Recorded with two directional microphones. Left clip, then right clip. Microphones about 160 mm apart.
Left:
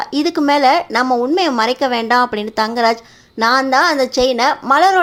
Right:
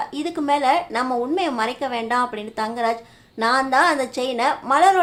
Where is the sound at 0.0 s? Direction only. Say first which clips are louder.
Left 8 dB; 35° left (ahead or behind).